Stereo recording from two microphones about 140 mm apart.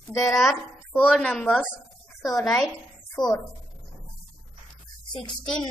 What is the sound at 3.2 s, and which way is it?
Speech, centre (ahead or behind).